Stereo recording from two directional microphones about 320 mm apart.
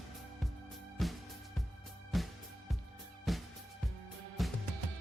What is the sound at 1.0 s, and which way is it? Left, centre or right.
Music, centre.